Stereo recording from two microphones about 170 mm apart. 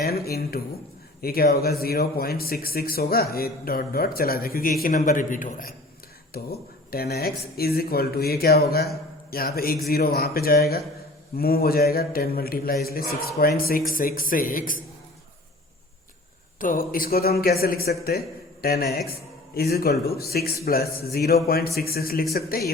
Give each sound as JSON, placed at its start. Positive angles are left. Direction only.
{"t": 0.0, "sound": "speech", "side_deg": 65}
{"t": 6.3, "sound": "speech", "side_deg": 65}
{"t": 16.6, "sound": "speech", "side_deg": 55}